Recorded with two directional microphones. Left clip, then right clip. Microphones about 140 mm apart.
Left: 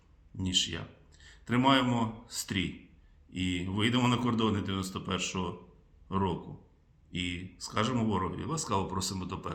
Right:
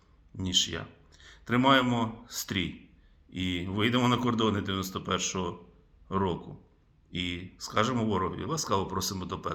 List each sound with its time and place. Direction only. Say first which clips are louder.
0.3 s a man's voice: right 2 dB; 15° left (ahead or behind)